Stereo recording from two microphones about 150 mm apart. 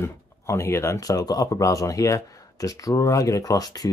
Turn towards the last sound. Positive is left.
turn(degrees=25)  # may be behind; listen again after turning